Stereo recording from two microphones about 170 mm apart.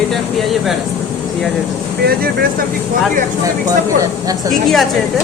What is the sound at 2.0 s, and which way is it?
Speech, 65° right (ahead or behind).